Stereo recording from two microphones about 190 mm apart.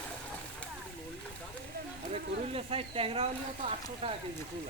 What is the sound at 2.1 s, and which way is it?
Speech, 30° right (ahead or behind).